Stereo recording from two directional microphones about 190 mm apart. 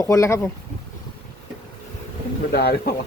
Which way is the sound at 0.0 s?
15° left (ahead or behind).